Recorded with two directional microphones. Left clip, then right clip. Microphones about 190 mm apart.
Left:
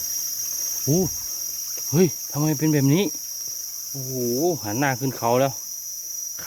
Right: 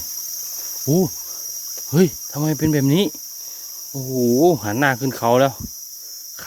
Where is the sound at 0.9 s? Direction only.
15° right (ahead or behind).